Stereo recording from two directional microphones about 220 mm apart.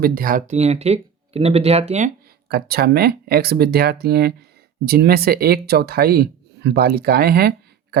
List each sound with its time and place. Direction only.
0.0 s speech: 40° right (ahead or behind)
2.5 s speech: 45° right (ahead or behind)